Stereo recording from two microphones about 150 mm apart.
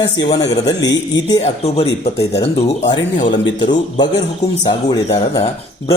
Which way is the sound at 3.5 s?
30° left (ahead or behind).